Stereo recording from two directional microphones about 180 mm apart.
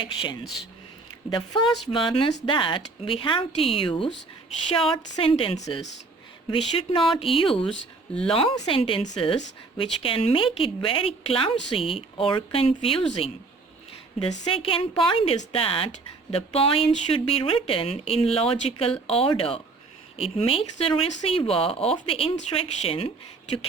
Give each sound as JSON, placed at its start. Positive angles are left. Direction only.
{"t": 0.0, "sound": "speech", "side_deg": 25}
{"t": 14.4, "sound": "speech", "side_deg": 30}